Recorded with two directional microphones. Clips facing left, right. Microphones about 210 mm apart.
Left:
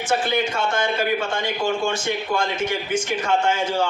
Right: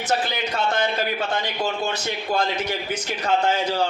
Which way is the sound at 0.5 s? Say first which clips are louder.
Even; 40° right (ahead or behind).